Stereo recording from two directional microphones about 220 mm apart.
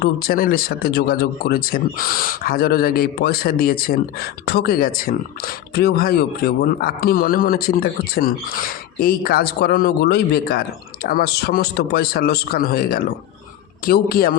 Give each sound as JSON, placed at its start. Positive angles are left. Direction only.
{"t": 0.0, "sound": "speech", "side_deg": 45}